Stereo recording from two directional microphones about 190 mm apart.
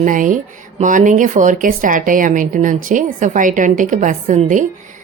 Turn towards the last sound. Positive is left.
turn(degrees=-40)  # may be behind; listen again after turning